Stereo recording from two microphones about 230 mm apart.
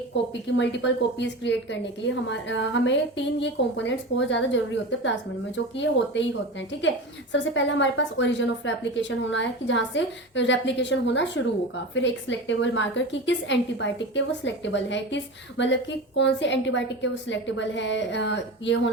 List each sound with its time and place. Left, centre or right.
0.4 s a woman's voice: left
7.3 s a woman's voice: left